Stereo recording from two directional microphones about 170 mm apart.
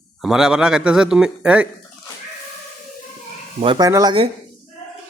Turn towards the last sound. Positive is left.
turn(degrees=-20)  # may be behind; listen again after turning